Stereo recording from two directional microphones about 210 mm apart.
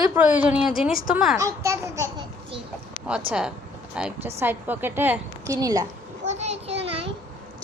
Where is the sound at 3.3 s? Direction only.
5° right (ahead or behind).